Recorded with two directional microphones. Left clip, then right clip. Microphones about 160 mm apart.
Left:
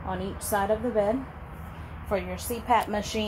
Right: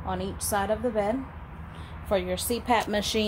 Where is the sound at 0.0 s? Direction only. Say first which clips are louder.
Right 1 dB; 25° right (ahead or behind).